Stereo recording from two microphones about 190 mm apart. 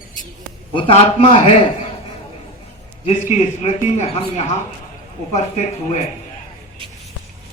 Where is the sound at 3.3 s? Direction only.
35° left (ahead or behind).